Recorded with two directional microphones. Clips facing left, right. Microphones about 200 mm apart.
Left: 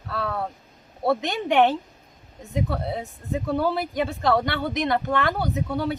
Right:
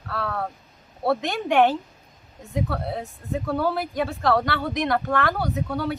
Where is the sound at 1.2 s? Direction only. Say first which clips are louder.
Right 1 dB; 20° left (ahead or behind).